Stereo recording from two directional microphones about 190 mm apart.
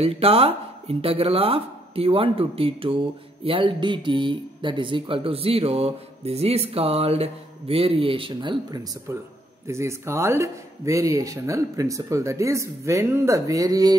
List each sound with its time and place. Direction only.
0.0 s speech: 30° right (ahead or behind)